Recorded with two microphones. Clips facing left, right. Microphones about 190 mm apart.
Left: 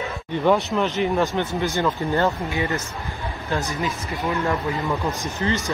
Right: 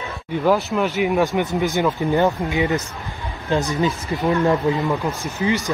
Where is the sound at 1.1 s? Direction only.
15° right (ahead or behind).